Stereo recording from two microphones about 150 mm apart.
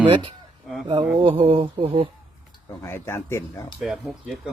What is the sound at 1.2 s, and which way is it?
Speech, 35° right (ahead or behind).